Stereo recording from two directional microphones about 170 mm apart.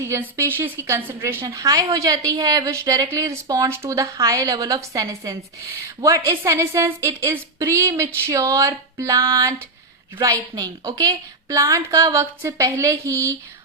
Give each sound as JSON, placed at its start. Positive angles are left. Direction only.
{"t": 0.0, "sound": "a woman's voice", "side_deg": -15}